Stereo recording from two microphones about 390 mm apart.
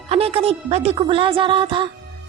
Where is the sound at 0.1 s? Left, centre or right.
Centre.